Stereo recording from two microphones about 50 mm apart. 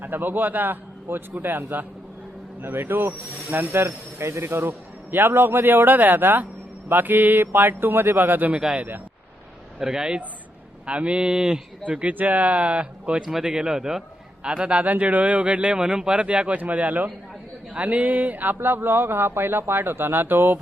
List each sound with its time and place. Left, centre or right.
0.0 s a man's voice: right
3.8 s a man's voice: right
9.7 s speech: centre
11.9 s a man's voice: right
14.8 s a man's voice: right